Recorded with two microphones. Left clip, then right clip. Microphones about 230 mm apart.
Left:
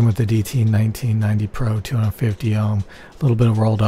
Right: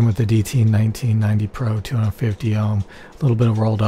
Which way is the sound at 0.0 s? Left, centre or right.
Centre.